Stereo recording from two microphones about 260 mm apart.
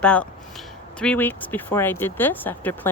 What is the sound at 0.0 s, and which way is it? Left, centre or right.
A woman's voice, centre.